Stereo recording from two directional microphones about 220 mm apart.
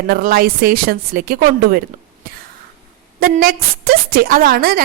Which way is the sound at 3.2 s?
40° right (ahead or behind).